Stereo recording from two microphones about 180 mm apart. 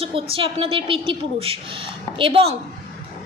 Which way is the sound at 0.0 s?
30° right (ahead or behind).